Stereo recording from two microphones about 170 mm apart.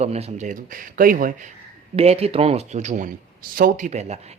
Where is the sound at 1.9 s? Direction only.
35° right (ahead or behind).